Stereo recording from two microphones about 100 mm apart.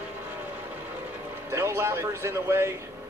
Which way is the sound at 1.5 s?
25° right (ahead or behind).